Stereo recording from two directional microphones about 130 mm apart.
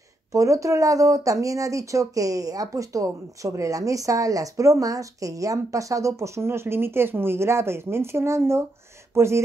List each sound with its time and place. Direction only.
0.3 s speech: 25° right (ahead or behind)